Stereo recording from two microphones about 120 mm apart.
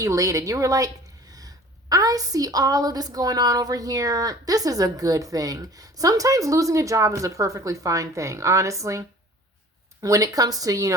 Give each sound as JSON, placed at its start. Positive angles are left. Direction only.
{"t": 0.0, "sound": "a woman's voice", "side_deg": -30}